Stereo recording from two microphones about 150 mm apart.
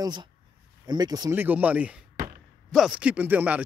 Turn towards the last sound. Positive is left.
turn(degrees=-10)  # may be behind; listen again after turning